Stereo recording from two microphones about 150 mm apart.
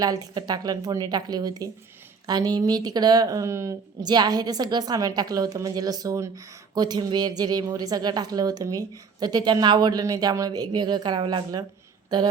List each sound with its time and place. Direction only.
0.0 s speech: 25° right (ahead or behind)